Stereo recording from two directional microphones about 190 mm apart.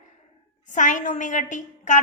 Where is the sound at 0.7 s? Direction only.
40° left (ahead or behind).